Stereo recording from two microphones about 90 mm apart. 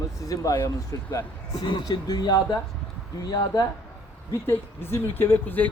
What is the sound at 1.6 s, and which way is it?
Speech, 55° left (ahead or behind).